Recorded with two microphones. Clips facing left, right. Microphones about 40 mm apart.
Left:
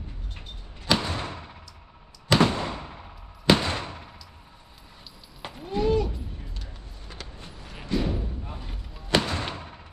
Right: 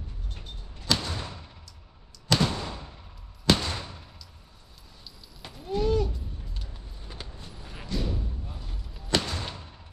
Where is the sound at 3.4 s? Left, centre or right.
Left.